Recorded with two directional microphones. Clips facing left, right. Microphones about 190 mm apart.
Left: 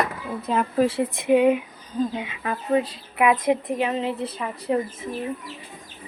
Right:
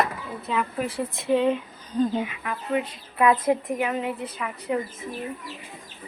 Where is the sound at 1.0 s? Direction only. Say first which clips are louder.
Left 1 dB; 15° left (ahead or behind).